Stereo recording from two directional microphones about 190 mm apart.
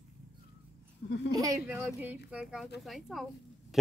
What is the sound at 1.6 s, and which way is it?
A woman's voice, 5° right (ahead or behind).